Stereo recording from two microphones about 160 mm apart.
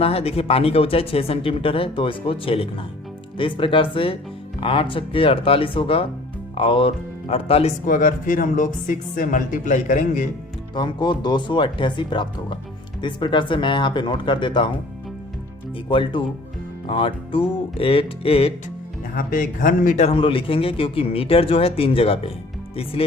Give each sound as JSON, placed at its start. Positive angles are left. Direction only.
{"t": 0.0, "sound": "speech", "side_deg": 40}
{"t": 7.9, "sound": "speech", "side_deg": 55}
{"t": 10.8, "sound": "speech", "side_deg": 30}
{"t": 15.9, "sound": "speech", "side_deg": 35}
{"t": 19.1, "sound": "speech", "side_deg": 60}
{"t": 20.1, "sound": "speech", "side_deg": 35}